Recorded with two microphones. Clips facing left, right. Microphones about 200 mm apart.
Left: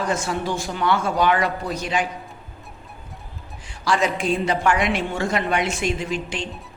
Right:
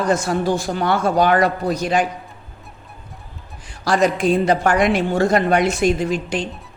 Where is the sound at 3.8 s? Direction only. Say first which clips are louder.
Right 5 dB; 40° right (ahead or behind).